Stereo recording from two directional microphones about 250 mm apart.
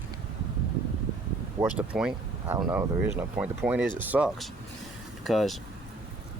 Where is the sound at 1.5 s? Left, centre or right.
Centre.